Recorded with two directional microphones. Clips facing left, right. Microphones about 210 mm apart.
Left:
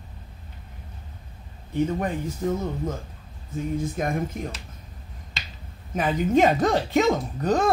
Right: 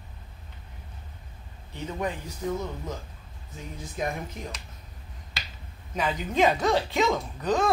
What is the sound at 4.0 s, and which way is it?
Speech, 50° left (ahead or behind).